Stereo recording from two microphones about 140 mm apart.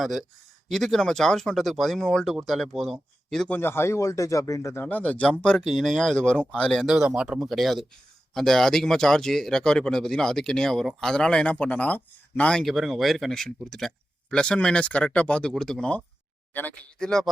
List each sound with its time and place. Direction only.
0.0 s speech: centre (ahead or behind)
3.6 s speech: 15° left (ahead or behind)